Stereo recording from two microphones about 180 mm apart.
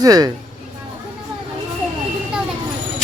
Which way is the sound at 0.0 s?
20° right (ahead or behind).